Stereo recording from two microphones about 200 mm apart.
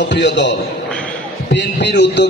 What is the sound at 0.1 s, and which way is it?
Speech, 60° left (ahead or behind).